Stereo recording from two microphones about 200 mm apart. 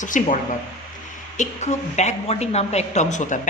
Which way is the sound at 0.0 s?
40° left (ahead or behind).